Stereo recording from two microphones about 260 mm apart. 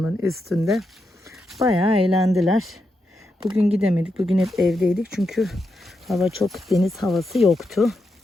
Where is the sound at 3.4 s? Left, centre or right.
Right.